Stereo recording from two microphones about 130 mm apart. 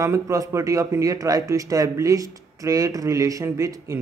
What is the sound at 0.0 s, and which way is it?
Speech, 25° right (ahead or behind).